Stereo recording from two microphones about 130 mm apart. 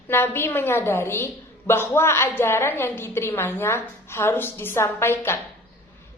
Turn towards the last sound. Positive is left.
turn(degrees=20)  # may be behind; listen again after turning